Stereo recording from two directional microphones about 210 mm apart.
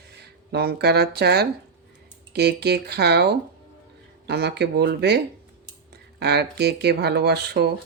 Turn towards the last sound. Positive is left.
turn(degrees=-50)  # may be behind; listen again after turning